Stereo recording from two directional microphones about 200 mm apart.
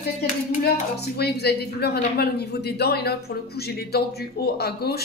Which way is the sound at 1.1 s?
55° left (ahead or behind).